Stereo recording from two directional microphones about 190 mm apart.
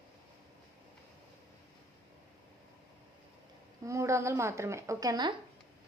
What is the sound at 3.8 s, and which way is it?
A woman's voice, 15° right (ahead or behind).